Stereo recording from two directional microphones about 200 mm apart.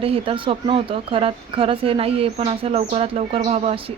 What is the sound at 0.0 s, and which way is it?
Speech, 25° right (ahead or behind).